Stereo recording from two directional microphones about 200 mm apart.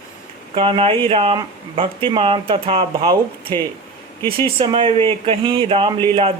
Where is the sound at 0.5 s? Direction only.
30° right (ahead or behind).